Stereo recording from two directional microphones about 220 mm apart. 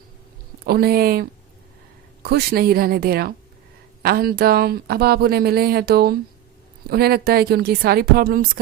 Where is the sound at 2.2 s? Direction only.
45° right (ahead or behind).